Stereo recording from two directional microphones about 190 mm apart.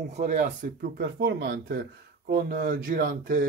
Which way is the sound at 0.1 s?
40° right (ahead or behind).